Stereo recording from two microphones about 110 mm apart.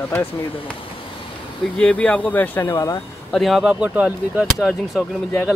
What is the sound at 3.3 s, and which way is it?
Speech, centre (ahead or behind).